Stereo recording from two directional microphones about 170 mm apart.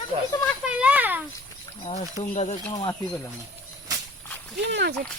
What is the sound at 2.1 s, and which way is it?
Speech, 45° left (ahead or behind).